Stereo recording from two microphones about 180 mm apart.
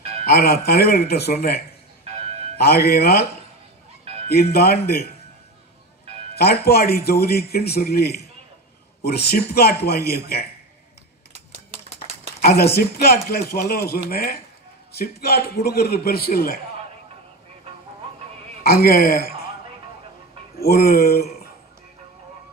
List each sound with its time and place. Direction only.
0.7 s speech: 60° left (ahead or behind)
4.0 s music: 35° right (ahead or behind)
4.3 s speech: 60° left (ahead or behind)
6.3 s speech: 60° left (ahead or behind)
11.3 s a sound: 40° right (ahead or behind)
12.4 s speech: 60° left (ahead or behind)
18.6 s speech: 60° left (ahead or behind)
20.5 s speech: 60° left (ahead or behind)